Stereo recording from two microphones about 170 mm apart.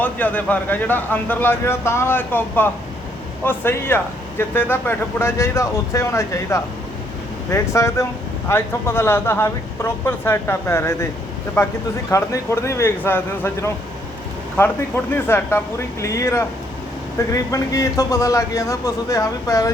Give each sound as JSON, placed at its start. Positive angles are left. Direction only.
{"t": 0.0, "sound": "speech", "side_deg": 10}
{"t": 15.1, "sound": "a man's voice", "side_deg": 15}